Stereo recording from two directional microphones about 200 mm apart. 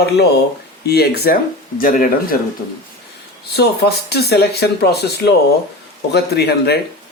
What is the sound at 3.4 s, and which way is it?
A man's voice, 55° left (ahead or behind).